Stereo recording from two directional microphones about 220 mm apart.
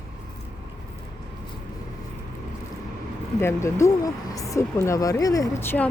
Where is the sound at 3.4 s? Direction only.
10° left (ahead or behind).